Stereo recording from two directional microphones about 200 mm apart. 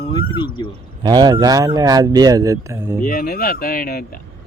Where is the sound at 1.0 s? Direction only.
20° right (ahead or behind).